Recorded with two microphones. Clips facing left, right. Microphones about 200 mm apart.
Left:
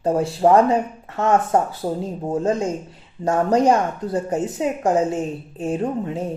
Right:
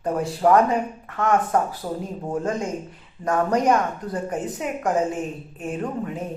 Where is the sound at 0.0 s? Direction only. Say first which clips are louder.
Left 3 dB; 25° left (ahead or behind).